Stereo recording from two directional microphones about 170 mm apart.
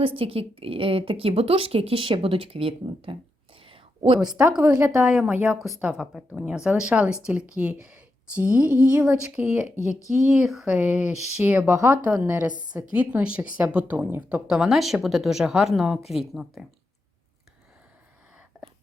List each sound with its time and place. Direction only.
0.0 s a woman's voice: 30° right (ahead or behind)
3.6 s whispering: 35° right (ahead or behind)
4.4 s a woman's voice: 5° right (ahead or behind)